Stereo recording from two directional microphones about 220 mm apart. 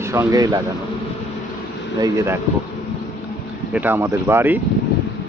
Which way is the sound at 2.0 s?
15° right (ahead or behind).